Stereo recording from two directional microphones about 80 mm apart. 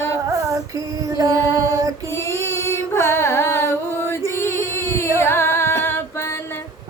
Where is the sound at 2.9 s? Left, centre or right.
Left.